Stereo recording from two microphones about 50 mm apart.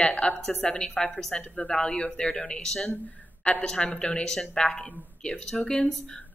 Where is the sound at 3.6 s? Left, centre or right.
Centre.